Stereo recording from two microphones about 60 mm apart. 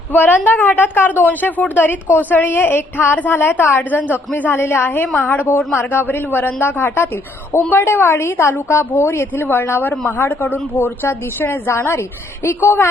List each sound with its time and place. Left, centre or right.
0.1 s a woman's voice: left